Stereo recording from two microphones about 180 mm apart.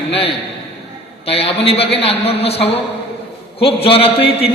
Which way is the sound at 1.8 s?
65° left (ahead or behind).